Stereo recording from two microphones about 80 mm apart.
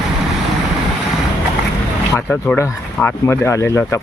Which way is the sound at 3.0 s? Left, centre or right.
Left.